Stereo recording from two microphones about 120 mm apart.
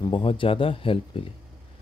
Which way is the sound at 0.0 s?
45° left (ahead or behind).